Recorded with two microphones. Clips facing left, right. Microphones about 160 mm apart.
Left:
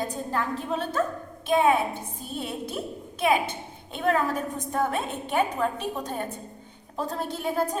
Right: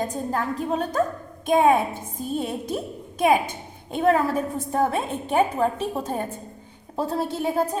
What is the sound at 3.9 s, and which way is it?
A woman's voice, 40° right (ahead or behind).